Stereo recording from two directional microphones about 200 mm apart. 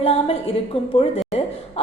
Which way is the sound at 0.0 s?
30° left (ahead or behind).